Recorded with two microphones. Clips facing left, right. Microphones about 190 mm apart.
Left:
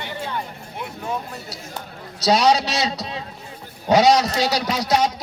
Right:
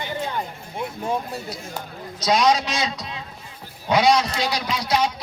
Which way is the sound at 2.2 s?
40° left (ahead or behind).